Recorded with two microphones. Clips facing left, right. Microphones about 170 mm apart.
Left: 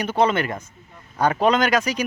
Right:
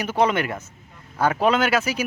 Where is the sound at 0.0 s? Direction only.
10° right (ahead or behind).